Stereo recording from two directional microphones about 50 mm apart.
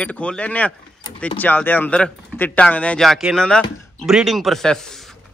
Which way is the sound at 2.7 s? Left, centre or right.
Left.